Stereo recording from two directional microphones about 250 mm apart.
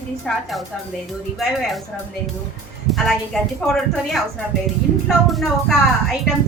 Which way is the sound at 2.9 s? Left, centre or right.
Centre.